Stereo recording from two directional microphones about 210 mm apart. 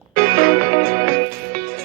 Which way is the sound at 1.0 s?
45° right (ahead or behind).